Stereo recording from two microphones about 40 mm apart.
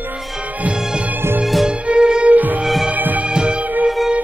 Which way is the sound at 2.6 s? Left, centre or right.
Centre.